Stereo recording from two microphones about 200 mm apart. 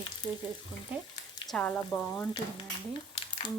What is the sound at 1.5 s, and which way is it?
Speech, 10° left (ahead or behind).